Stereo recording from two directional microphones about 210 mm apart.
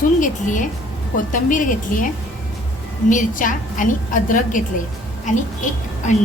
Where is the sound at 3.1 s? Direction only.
40° left (ahead or behind).